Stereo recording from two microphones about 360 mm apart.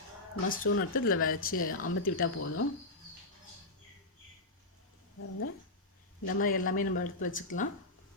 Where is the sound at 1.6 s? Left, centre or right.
Left.